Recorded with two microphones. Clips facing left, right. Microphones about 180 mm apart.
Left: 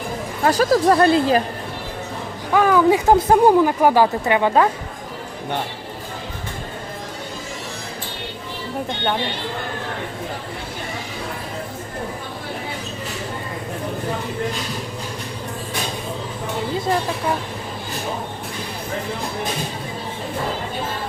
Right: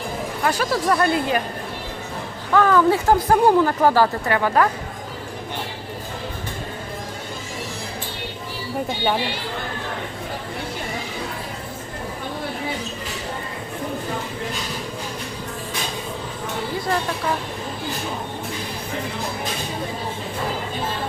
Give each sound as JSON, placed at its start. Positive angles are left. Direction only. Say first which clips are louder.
{"t": 0.4, "sound": "speech", "louder": "left 6 dB", "side_deg": 40}
{"t": 2.5, "sound": "speech", "louder": "left 1 dB", "side_deg": 10}
{"t": 8.9, "sound": "speech", "louder": "right 1 dB", "side_deg": -5}